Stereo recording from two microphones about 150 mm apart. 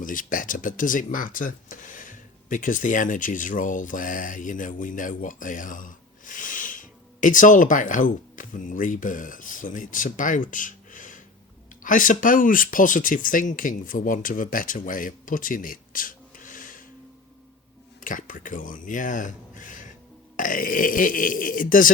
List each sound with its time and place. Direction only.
0.0 s speech: 65° left (ahead or behind)
18.0 s speech: 60° left (ahead or behind)